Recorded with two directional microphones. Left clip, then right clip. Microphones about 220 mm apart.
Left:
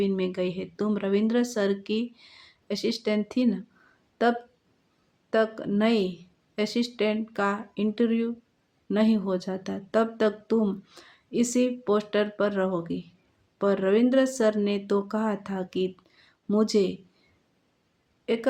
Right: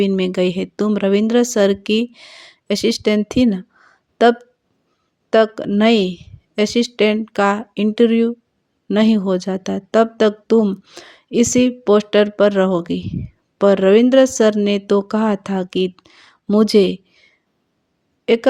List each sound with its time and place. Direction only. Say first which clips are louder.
0.0 s speech: right 10 dB; 35° right (ahead or behind)
18.3 s speech: right 12 dB; 40° right (ahead or behind)